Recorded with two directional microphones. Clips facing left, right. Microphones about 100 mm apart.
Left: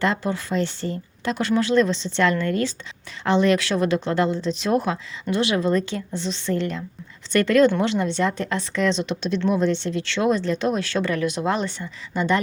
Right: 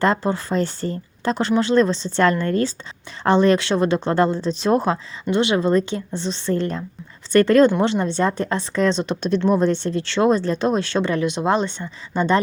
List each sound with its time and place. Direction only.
0.0 s speech: 35° right (ahead or behind)